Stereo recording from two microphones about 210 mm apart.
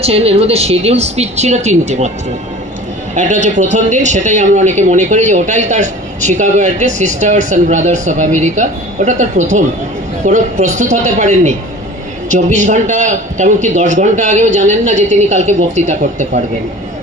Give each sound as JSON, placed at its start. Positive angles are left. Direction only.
{"t": 0.0, "sound": "speech", "side_deg": -30}
{"t": 3.2, "sound": "speech", "side_deg": -35}